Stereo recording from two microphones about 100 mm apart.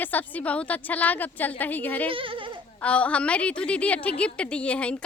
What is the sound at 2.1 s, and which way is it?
Speech, 60° right (ahead or behind).